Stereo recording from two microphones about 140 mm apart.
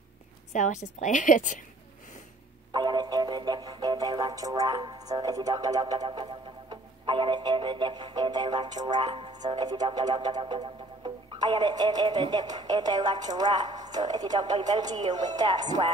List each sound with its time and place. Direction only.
0.5 s a woman's voice: 60° left (ahead or behind)
2.7 s music: 30° right (ahead or behind)
11.3 s speech: 30° right (ahead or behind)